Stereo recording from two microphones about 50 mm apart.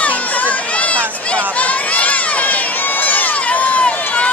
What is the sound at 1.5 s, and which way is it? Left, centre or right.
Run, left.